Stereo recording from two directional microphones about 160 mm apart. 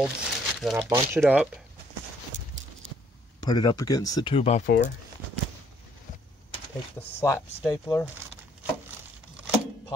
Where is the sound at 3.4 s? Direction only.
25° left (ahead or behind).